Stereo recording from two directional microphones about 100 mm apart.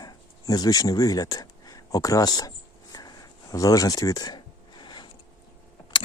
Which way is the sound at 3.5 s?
35° left (ahead or behind).